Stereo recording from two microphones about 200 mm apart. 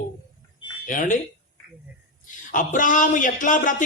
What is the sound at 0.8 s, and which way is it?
Speech, 40° left (ahead or behind).